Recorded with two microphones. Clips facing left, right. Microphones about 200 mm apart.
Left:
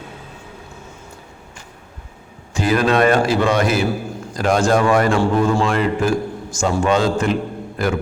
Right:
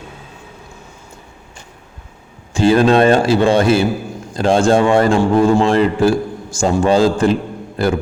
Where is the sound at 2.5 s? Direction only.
30° right (ahead or behind).